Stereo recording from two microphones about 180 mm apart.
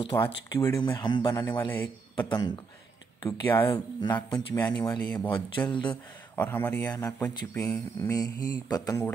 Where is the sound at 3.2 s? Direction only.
20° left (ahead or behind).